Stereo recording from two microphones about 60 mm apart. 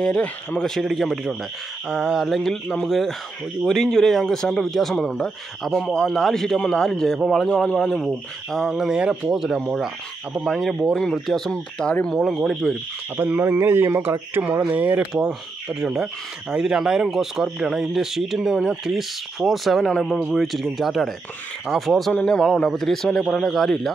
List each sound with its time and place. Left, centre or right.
0.0 s speech: centre
0.9 s a man's voice: centre
1.9 s speech: centre
2.2 s a man's voice: centre
8.7 s speech: centre
11.5 s a man's voice: centre
12.2 s speech: centre
13.2 s a man's voice: right
14.7 s speech: right
15.7 s speech: centre
19.9 s a man's voice: centre
20.6 s a man's voice: centre